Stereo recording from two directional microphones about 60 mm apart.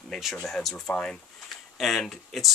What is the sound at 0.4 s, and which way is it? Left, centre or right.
Speech, centre.